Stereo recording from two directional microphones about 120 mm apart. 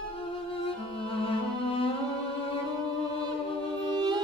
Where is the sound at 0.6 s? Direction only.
50° left (ahead or behind).